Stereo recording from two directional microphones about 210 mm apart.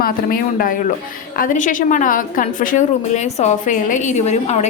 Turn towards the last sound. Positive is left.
turn(degrees=30)  # may be behind; listen again after turning